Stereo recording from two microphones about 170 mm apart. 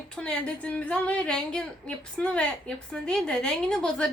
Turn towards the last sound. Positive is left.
turn(degrees=5)  # may be behind; listen again after turning